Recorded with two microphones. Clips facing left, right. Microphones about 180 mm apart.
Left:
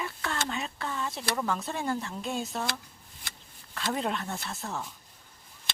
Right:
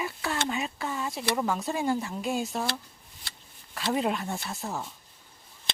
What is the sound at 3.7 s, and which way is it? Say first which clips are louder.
Speech: right 3 dB; 15° right (ahead or behind).